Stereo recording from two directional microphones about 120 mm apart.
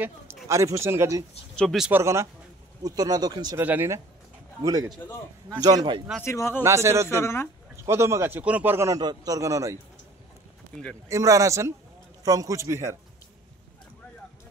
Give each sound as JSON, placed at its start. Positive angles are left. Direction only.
{"t": 0.0, "sound": "a man's voice", "side_deg": -20}
{"t": 1.6, "sound": "speech", "side_deg": 0}
{"t": 1.9, "sound": "a man's voice", "side_deg": -20}
{"t": 2.8, "sound": "speech", "side_deg": -35}
{"t": 3.5, "sound": "a man's voice", "side_deg": -15}
{"t": 5.0, "sound": "speech", "side_deg": 20}
{"t": 5.6, "sound": "speech", "side_deg": -35}
{"t": 6.2, "sound": "speech", "side_deg": 25}
{"t": 6.6, "sound": "a man's voice", "side_deg": -25}
{"t": 7.1, "sound": "speech", "side_deg": 20}
{"t": 7.7, "sound": "a man's voice", "side_deg": -25}
{"t": 11.1, "sound": "a man's voice", "side_deg": -25}